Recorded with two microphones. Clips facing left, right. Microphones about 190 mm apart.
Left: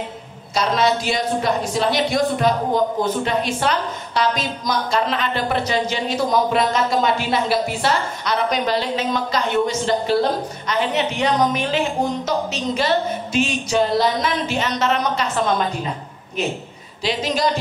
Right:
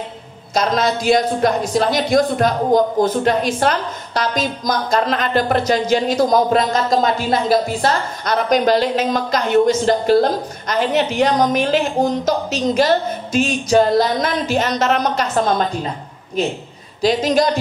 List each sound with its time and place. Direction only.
0.6 s speech: 45° right (ahead or behind)
17.0 s speech: 45° right (ahead or behind)